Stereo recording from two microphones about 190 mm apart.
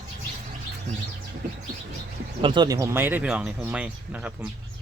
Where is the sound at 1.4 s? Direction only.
50° right (ahead or behind).